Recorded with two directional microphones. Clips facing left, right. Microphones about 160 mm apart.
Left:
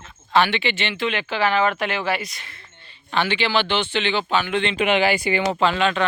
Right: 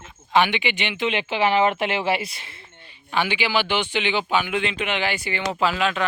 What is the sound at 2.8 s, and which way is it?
Speech, 10° right (ahead or behind).